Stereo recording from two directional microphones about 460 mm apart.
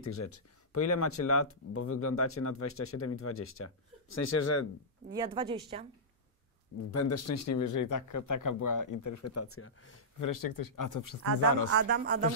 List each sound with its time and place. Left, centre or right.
0.0 s speech: left
5.1 s a woman's voice: centre
6.9 s speech: left
10.1 s speech: left
11.2 s speech: right